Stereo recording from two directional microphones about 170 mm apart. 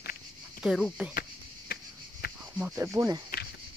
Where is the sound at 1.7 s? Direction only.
65° left (ahead or behind).